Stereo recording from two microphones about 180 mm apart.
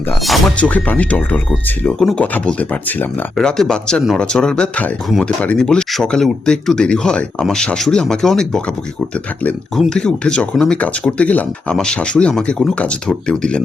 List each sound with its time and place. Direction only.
0.3 s speech: 5° left (ahead or behind)